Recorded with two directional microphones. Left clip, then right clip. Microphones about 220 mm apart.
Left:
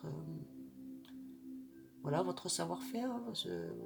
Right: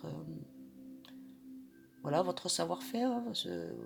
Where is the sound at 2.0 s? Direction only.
35° right (ahead or behind).